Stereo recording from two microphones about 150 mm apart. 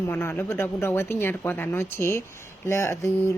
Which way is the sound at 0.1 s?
15° left (ahead or behind).